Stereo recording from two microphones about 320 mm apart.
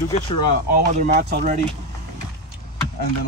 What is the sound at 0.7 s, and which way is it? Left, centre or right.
Speech, right.